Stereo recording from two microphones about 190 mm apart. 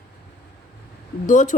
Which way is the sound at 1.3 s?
40° left (ahead or behind).